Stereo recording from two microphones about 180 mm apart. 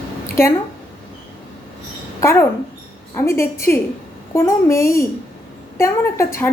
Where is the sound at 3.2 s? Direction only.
15° left (ahead or behind).